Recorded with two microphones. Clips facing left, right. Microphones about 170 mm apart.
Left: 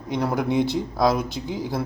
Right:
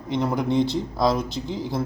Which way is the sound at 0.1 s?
Centre (ahead or behind).